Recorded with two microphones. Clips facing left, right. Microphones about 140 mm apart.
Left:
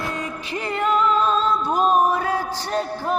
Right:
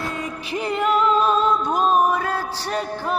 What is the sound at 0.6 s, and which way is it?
Singing, 15° right (ahead or behind).